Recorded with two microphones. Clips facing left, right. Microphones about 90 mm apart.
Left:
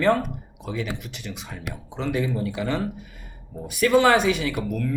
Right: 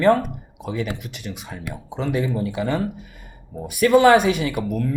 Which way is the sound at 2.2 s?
20° right (ahead or behind).